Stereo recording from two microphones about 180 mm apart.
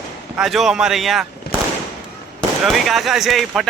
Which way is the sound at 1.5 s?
60° left (ahead or behind).